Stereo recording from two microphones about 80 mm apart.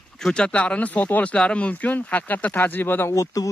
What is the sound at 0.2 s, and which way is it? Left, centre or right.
Speech, centre.